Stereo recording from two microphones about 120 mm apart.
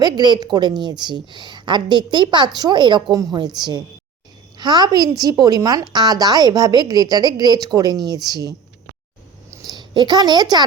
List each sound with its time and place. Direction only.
0.0 s a woman's voice: 35° right (ahead or behind)
4.5 s a woman's voice: 35° right (ahead or behind)
9.6 s a woman's voice: 35° right (ahead or behind)